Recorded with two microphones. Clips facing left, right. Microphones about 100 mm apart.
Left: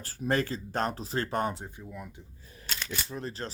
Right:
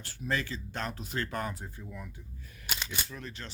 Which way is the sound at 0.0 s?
40° left (ahead or behind).